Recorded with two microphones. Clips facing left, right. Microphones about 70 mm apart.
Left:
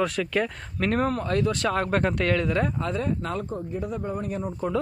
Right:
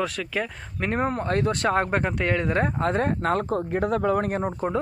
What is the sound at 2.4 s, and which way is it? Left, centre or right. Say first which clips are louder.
Speech: right 2 dB; right.